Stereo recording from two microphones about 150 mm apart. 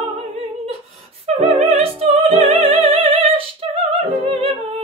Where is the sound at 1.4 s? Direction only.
45° right (ahead or behind).